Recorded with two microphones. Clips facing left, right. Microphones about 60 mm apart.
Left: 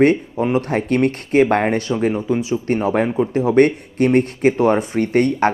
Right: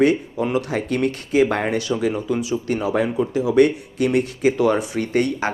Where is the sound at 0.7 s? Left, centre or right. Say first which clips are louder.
Left 4 dB; left.